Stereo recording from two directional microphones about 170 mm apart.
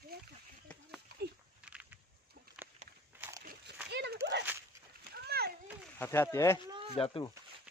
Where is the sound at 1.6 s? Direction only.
5° right (ahead or behind).